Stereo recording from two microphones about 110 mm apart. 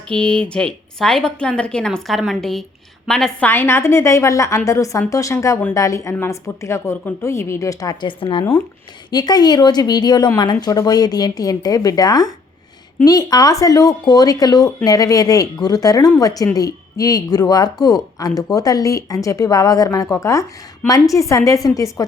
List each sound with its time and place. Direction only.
0.1 s a woman's voice: 10° left (ahead or behind)
3.4 s a woman's voice: 20° left (ahead or behind)
8.0 s a woman's voice: 50° left (ahead or behind); by 22.0 s 30° left (ahead or behind)